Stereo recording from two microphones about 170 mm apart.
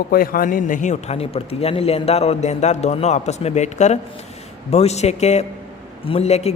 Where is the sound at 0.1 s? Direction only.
60° left (ahead or behind).